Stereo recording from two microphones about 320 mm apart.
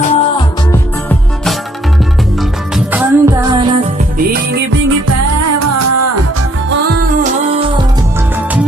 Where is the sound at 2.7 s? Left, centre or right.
Centre.